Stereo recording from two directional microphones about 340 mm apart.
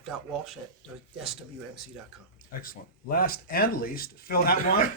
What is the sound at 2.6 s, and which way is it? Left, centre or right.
Speech, left.